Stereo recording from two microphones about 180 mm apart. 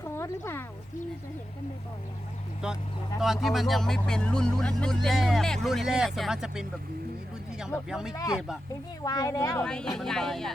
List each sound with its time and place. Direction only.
0.1 s a sound: 15° left (ahead or behind)
2.6 s speech: 5° right (ahead or behind)
7.9 s speech: 5° right (ahead or behind)
8.1 s speech: 20° left (ahead or behind)
9.6 s speech: 5° left (ahead or behind)